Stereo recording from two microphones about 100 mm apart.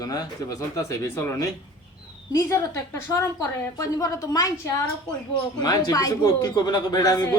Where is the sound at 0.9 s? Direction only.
25° left (ahead or behind).